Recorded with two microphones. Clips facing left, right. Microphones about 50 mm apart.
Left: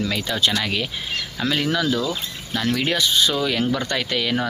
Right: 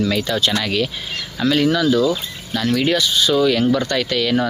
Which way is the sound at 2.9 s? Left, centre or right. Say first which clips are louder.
Right 2 dB; left.